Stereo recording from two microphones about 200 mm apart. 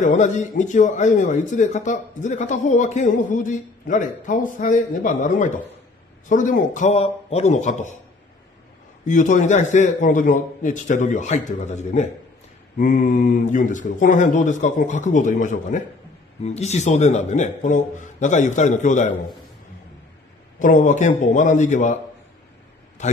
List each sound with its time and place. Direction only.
0.0 s speech: 40° left (ahead or behind)
9.0 s speech: 40° left (ahead or behind)
20.5 s speech: 40° left (ahead or behind)